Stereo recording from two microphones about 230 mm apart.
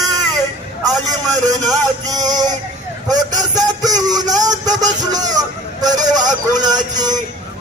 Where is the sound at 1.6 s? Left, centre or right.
Centre.